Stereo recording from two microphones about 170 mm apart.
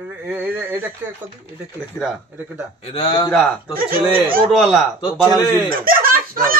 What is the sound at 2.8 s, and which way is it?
Speech, 35° left (ahead or behind).